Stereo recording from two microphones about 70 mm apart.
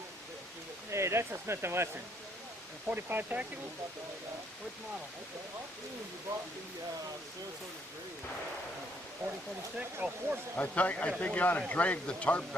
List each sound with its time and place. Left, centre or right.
0.9 s speech: right
9.7 s speech: right
10.6 s speech: left